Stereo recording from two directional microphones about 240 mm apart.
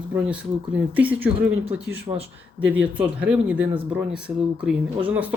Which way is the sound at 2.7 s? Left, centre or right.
Centre.